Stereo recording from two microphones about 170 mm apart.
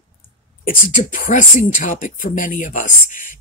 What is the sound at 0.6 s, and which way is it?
Speech, 55° left (ahead or behind).